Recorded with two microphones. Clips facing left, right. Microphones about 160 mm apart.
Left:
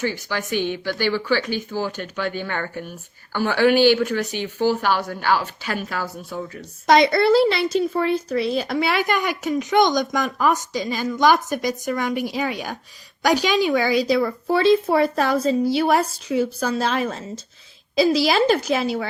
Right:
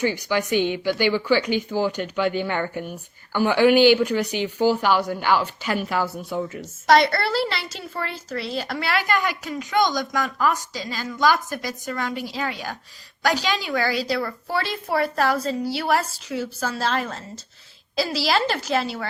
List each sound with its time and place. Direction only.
0.0 s speech: 15° right (ahead or behind)
5.3 s speech: 45° left (ahead or behind)
6.8 s a woman's voice: 15° left (ahead or behind)